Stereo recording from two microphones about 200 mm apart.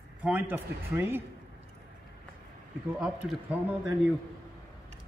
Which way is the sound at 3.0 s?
5° right (ahead or behind).